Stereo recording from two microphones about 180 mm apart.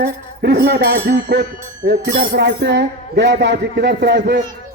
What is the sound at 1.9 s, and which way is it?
Speech, 60° right (ahead or behind).